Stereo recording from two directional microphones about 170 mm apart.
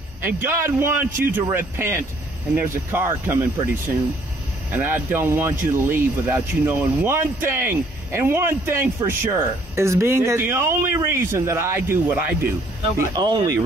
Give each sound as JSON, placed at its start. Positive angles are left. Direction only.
{"t": 0.2, "sound": "speech", "side_deg": -10}
{"t": 4.7, "sound": "speech", "side_deg": -10}
{"t": 13.1, "sound": "speech", "side_deg": -25}